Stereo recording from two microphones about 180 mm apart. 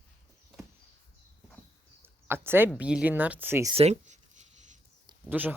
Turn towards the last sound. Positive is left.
turn(degrees=-10)  # may be behind; listen again after turning